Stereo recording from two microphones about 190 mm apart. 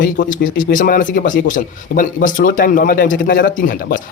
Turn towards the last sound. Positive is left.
turn(degrees=45)  # may be behind; listen again after turning